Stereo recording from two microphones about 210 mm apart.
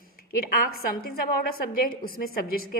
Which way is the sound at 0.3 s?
45° left (ahead or behind).